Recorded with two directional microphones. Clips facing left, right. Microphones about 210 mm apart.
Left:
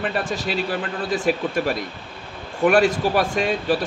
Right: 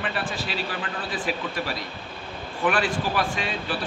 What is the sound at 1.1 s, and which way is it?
Speech, 45° left (ahead or behind).